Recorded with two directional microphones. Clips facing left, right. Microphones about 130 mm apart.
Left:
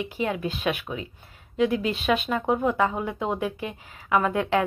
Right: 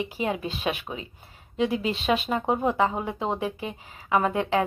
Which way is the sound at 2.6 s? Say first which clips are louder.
Even; 30° right (ahead or behind).